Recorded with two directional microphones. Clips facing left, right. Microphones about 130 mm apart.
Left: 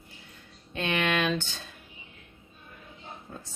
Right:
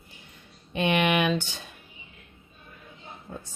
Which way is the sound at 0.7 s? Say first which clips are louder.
Right 4 dB; 15° right (ahead or behind).